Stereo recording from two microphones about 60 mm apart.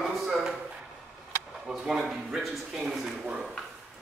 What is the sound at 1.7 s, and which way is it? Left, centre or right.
Speech, centre.